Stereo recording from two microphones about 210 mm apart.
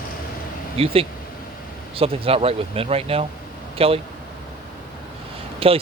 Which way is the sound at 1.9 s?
25° right (ahead or behind).